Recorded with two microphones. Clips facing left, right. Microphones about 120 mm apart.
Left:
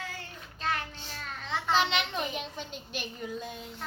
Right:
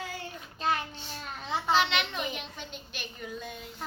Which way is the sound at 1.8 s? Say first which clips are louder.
Even; 35° left (ahead or behind).